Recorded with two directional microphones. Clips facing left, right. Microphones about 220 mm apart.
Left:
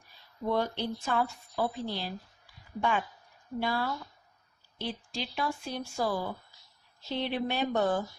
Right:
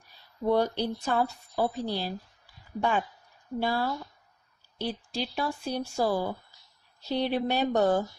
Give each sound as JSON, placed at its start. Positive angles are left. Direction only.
{"t": 0.4, "sound": "speech", "side_deg": -40}
{"t": 3.6, "sound": "speech", "side_deg": -35}